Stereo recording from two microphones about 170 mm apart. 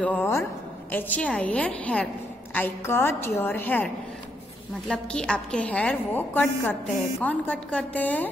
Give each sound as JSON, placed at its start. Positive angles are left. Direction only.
{"t": 0.0, "sound": "a woman's voice", "side_deg": 10}